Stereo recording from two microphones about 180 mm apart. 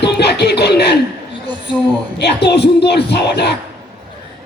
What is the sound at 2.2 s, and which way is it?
Speech, 70° left (ahead or behind).